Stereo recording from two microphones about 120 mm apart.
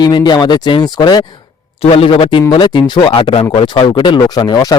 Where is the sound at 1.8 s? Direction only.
55° left (ahead or behind); by 4.8 s 35° left (ahead or behind).